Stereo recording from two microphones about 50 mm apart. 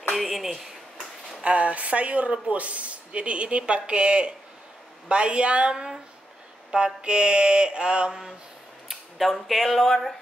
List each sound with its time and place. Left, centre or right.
0.1 s speech: centre
1.4 s speech: right
8.1 s a sound: centre
8.8 s speech: centre